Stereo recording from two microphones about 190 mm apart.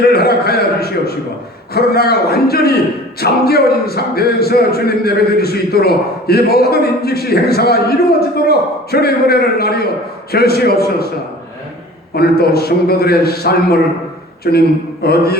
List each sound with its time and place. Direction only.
0.0 s a man's voice: 55° left (ahead or behind)
12.1 s a man's voice: 55° left (ahead or behind)